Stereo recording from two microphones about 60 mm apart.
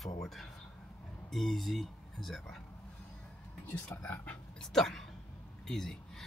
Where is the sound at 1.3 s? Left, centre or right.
Centre.